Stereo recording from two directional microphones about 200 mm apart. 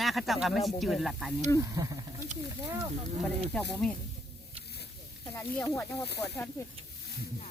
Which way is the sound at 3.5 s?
5° left (ahead or behind).